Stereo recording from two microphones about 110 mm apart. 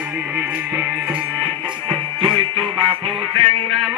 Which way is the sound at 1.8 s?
60° right (ahead or behind).